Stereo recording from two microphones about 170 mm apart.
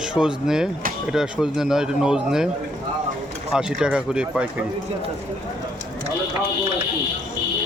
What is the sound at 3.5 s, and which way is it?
Speech, 5° right (ahead or behind).